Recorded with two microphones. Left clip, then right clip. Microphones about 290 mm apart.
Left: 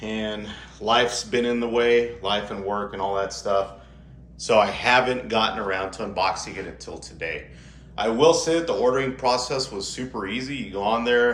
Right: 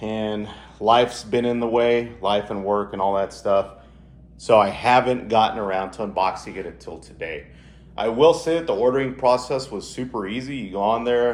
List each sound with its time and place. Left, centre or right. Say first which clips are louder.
0.0 s speech: right 3 dB; centre